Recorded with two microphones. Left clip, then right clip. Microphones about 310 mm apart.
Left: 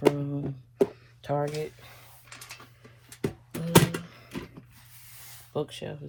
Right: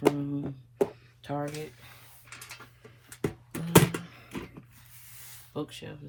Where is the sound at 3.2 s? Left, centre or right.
Centre.